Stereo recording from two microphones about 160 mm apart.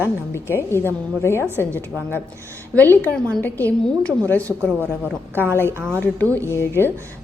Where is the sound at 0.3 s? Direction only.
15° left (ahead or behind).